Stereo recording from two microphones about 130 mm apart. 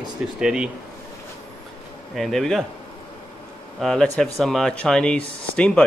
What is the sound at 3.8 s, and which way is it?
A man's voice, 5° left (ahead or behind).